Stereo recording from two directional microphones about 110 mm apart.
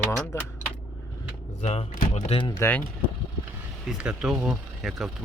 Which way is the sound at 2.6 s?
15° left (ahead or behind).